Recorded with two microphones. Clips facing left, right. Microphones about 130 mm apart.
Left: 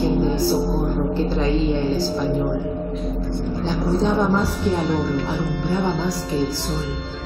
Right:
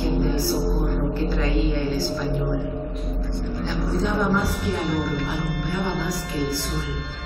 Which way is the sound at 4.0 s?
30° left (ahead or behind).